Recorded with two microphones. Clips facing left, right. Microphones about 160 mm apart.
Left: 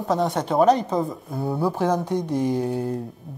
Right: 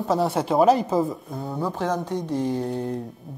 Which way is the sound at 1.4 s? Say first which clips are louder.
Left 5 dB; 10° left (ahead or behind).